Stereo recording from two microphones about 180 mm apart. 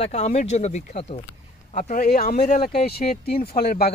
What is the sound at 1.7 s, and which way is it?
Speech, 50° left (ahead or behind).